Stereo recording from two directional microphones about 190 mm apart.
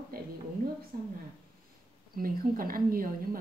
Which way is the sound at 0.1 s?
50° right (ahead or behind).